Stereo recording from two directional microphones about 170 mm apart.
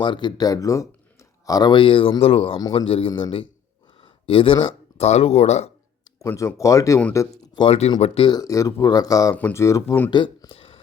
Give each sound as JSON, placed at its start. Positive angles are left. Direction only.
{"t": 0.0, "sound": "speech", "side_deg": 25}
{"t": 4.0, "sound": "a sound", "side_deg": 30}
{"t": 4.9, "sound": "speech", "side_deg": 40}
{"t": 6.1, "sound": "speech", "side_deg": 20}
{"t": 7.6, "sound": "speech", "side_deg": 35}
{"t": 10.1, "sound": "speech", "side_deg": 25}